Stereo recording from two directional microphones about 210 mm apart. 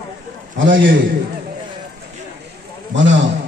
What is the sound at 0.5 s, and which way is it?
Speech, 60° right (ahead or behind).